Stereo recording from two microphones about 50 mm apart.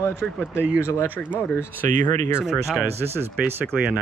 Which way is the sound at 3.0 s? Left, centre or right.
Right.